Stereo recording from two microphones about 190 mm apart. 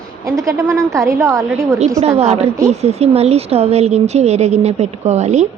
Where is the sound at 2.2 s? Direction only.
35° right (ahead or behind).